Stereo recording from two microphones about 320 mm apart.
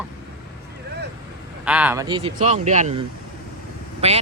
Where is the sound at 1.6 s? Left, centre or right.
Centre.